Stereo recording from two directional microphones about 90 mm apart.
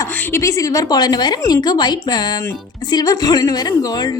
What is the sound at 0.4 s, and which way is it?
A woman's voice, 40° left (ahead or behind).